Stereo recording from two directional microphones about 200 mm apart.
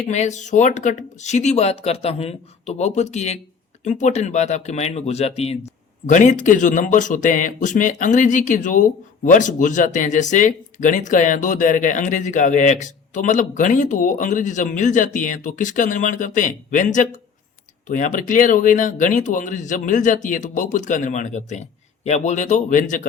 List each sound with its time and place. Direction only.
0.1 s speech: 35° left (ahead or behind)